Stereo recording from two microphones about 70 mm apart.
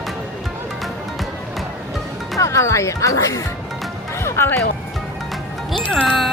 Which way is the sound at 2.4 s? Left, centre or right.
Left.